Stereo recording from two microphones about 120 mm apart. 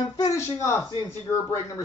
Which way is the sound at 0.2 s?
25° left (ahead or behind).